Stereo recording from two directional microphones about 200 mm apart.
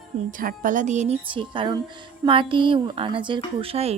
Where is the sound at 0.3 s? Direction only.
40° right (ahead or behind).